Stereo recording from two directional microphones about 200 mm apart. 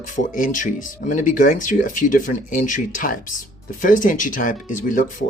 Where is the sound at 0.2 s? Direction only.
40° left (ahead or behind).